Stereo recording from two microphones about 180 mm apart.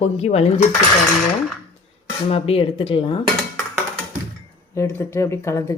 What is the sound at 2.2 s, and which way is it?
Dishes, 35° left (ahead or behind).